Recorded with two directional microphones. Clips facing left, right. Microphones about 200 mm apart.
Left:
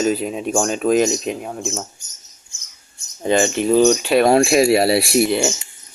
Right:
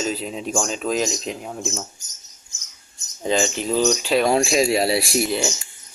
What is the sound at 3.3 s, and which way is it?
Speech, 60° left (ahead or behind).